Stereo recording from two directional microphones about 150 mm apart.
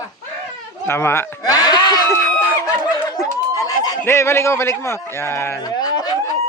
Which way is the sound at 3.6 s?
25° left (ahead or behind).